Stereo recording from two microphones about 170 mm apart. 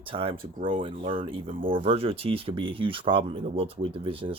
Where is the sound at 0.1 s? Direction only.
30° right (ahead or behind).